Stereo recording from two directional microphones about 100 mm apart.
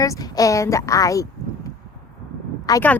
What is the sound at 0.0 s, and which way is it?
A woman's voice, 35° left (ahead or behind).